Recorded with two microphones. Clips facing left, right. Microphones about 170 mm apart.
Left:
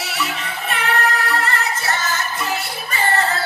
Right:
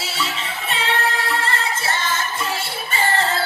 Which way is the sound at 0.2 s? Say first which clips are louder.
Left 1 dB; 25° right (ahead or behind).